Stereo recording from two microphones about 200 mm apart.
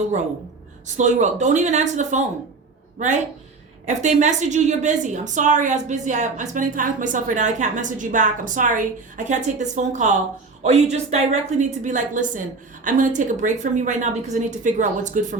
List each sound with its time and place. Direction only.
0.9 s a woman's voice: 35° right (ahead or behind)